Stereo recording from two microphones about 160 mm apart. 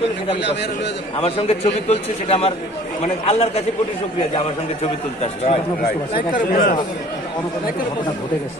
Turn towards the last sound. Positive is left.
turn(degrees=60)  # may be behind; listen again after turning